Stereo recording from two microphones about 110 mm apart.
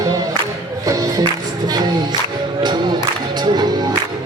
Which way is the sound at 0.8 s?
35° right (ahead or behind).